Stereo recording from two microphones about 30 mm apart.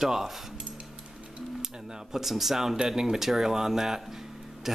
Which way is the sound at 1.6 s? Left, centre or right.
Centre.